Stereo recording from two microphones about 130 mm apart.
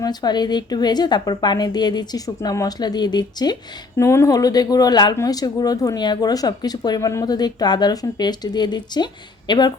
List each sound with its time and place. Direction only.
0.0 s a woman's voice: 35° left (ahead or behind)
3.9 s a woman's voice: 20° left (ahead or behind)